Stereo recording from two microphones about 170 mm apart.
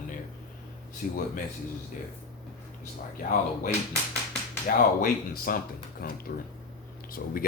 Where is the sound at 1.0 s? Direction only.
60° left (ahead or behind).